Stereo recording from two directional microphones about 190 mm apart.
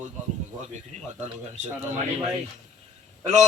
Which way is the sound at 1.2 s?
40° right (ahead or behind).